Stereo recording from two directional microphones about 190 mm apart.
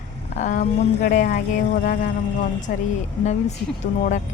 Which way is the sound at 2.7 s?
55° left (ahead or behind).